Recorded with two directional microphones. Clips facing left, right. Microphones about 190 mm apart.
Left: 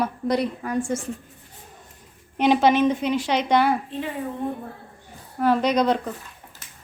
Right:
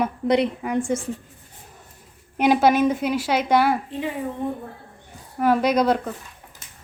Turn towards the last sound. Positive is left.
turn(degrees=-5)  # may be behind; listen again after turning